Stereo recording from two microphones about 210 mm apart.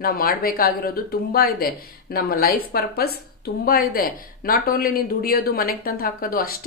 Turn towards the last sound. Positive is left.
turn(degrees=45)  # may be behind; listen again after turning